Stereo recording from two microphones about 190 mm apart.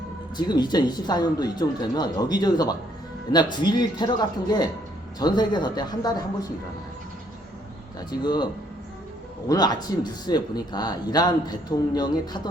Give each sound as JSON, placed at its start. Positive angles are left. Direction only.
{"t": 0.3, "sound": "speech", "side_deg": 20}
{"t": 8.2, "sound": "speech", "side_deg": 20}
{"t": 9.5, "sound": "speech", "side_deg": 20}